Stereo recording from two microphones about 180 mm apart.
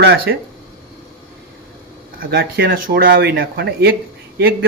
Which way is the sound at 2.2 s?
55° right (ahead or behind).